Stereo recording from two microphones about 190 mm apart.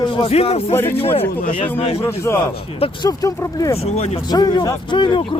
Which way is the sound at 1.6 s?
35° left (ahead or behind).